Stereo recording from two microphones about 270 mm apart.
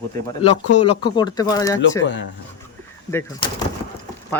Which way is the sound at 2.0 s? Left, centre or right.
Left.